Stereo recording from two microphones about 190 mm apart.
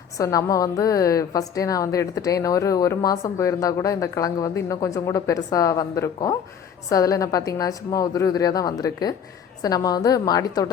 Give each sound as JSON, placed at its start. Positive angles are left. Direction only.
{"t": 0.2, "sound": "a woman's voice", "side_deg": 15}